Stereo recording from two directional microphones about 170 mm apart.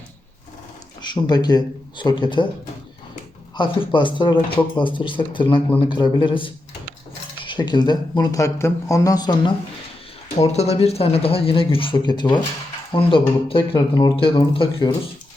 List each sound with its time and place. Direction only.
1.0 s speech: 25° left (ahead or behind)
3.5 s speech: 30° left (ahead or behind)
10.4 s speech: 40° left (ahead or behind)